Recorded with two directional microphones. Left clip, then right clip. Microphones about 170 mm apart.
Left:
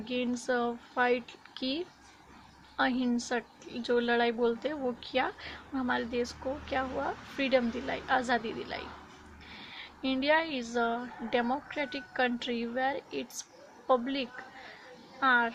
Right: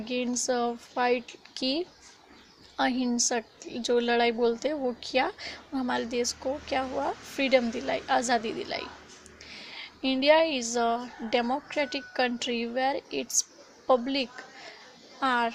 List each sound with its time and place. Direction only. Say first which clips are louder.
0.0 s a woman's voice: right 3 dB; 30° right (ahead or behind)